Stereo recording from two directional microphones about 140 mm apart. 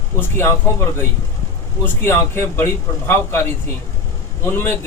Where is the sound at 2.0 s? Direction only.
15° left (ahead or behind).